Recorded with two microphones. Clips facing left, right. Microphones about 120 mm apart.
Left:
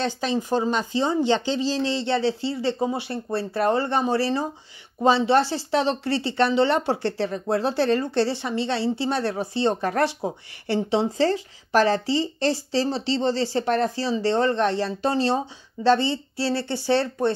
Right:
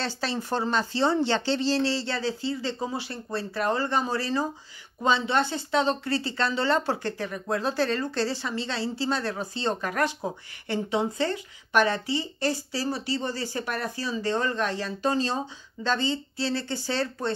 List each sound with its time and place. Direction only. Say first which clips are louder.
0.0 s a woman's voice: left 5 dB; 15° left (ahead or behind)